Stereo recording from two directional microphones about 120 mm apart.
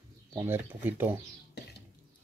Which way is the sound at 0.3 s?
25° right (ahead or behind).